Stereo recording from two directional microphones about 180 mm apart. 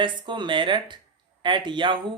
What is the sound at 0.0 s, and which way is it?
Speech, 25° right (ahead or behind).